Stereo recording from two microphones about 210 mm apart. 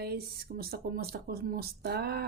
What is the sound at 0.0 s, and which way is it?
Speech, 45° right (ahead or behind).